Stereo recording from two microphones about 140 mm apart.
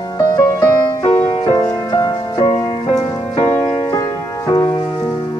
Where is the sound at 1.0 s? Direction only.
15° left (ahead or behind).